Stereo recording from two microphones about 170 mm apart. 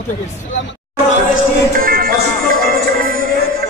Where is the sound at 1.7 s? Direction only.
55° right (ahead or behind).